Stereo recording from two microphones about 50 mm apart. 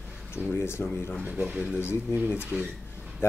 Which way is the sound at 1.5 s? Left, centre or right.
Centre.